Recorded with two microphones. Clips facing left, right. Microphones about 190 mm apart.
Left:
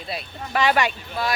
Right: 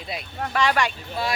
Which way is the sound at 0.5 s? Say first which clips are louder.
Left 2 dB; 5° left (ahead or behind).